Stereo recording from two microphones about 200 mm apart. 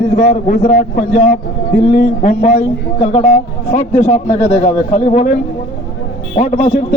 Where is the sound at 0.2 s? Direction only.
45° left (ahead or behind).